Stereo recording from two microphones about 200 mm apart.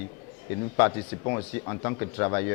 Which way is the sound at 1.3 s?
20° left (ahead or behind).